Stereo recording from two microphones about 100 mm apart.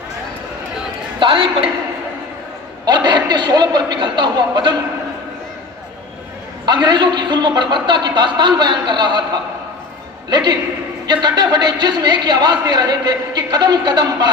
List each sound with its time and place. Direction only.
1.2 s a man's voice: 55° right (ahead or behind)
3.1 s a man's voice: 45° right (ahead or behind)
6.6 s a man's voice: 45° right (ahead or behind)